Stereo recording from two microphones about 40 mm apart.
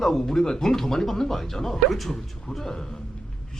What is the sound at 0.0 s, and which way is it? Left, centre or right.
A man's voice, centre.